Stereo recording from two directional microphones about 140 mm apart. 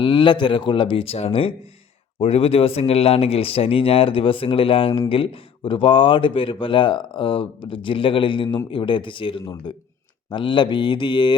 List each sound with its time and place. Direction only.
0.0 s speech: 35° left (ahead or behind)